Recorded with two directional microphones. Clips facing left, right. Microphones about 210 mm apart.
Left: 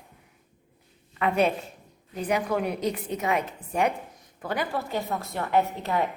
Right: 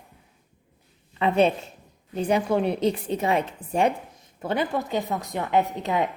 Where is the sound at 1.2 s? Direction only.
25° right (ahead or behind).